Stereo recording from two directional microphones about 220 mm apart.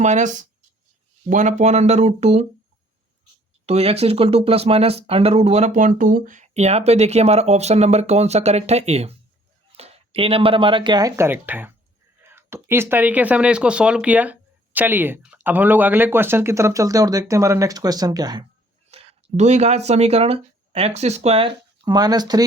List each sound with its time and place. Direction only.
0.0 s speech: 35° right (ahead or behind)
3.7 s speech: 30° right (ahead or behind)
18.9 s speech: 25° right (ahead or behind)